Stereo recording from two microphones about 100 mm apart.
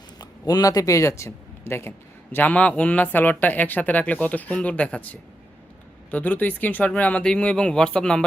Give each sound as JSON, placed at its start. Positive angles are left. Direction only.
{"t": 0.2, "sound": "a man's voice", "side_deg": 40}
{"t": 6.1, "sound": "speech", "side_deg": 15}